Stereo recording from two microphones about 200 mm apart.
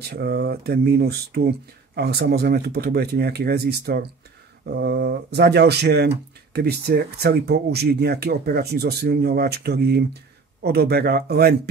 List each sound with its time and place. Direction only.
0.0 s speech: 55° right (ahead or behind)